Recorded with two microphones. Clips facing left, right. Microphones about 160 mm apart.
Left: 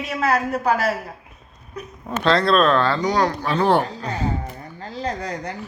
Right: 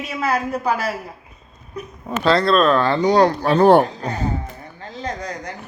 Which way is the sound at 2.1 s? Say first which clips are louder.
Right 1 dB; 5° right (ahead or behind).